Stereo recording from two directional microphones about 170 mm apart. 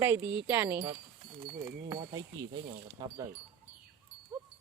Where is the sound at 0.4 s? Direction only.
15° right (ahead or behind).